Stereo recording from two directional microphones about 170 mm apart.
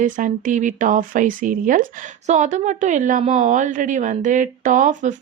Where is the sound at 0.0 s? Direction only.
50° right (ahead or behind).